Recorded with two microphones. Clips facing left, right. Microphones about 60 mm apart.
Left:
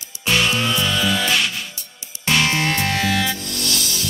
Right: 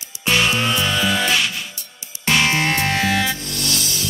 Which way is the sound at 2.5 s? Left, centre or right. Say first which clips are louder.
Right 1 dB; right.